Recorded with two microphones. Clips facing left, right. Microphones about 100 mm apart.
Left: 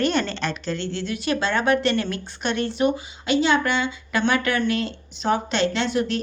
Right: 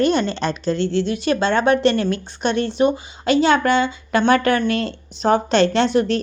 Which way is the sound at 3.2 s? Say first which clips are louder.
Right 5 dB; 45° right (ahead or behind).